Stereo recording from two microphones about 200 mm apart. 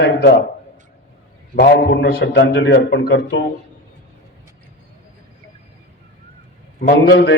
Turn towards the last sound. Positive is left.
turn(degrees=55)  # may be behind; listen again after turning